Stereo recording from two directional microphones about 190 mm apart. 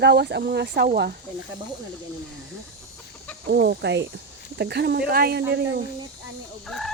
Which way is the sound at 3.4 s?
60° right (ahead or behind).